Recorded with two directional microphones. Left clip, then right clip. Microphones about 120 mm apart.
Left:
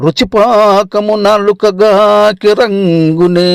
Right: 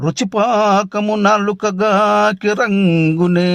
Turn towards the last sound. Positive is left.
turn(degrees=30)  # may be behind; listen again after turning